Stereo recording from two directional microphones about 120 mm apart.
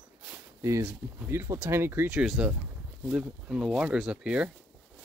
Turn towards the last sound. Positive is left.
turn(degrees=-10)  # may be behind; listen again after turning